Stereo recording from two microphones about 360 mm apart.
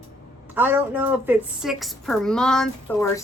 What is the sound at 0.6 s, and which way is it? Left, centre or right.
A woman's voice, centre.